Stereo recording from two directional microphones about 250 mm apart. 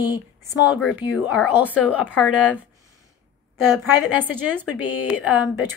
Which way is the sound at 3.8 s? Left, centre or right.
Centre.